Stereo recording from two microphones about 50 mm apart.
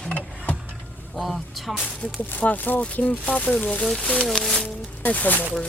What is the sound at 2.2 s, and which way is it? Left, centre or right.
Speech, left.